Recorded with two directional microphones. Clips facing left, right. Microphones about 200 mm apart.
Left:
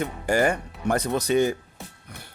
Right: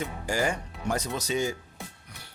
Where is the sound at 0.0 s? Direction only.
60° left (ahead or behind).